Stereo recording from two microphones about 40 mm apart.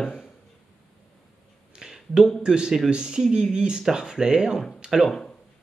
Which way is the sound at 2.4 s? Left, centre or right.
Centre.